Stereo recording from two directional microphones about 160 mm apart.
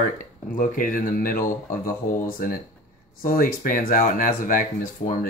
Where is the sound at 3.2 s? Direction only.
60° left (ahead or behind).